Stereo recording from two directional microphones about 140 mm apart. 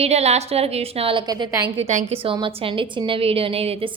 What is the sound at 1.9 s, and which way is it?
Speech, 60° right (ahead or behind).